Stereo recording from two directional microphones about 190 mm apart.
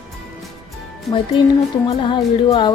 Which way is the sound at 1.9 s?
20° left (ahead or behind).